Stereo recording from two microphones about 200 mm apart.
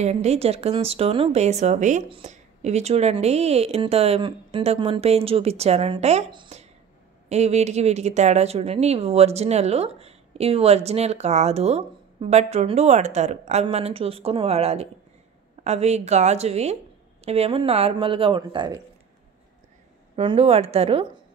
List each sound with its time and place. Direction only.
0.0 s speech: 35° right (ahead or behind)
20.2 s speech: 30° right (ahead or behind)